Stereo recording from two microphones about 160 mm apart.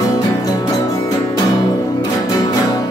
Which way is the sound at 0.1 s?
25° left (ahead or behind).